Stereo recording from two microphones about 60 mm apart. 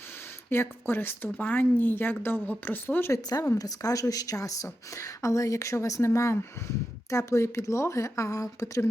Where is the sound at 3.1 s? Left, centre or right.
Left.